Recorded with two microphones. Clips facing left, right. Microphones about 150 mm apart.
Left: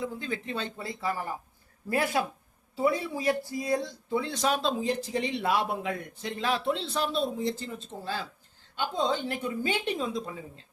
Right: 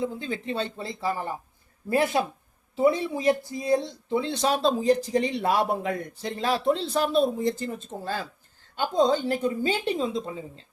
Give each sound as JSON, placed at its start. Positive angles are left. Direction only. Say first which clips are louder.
{"t": 0.0, "sound": "speech", "louder": "right 4 dB", "side_deg": -25}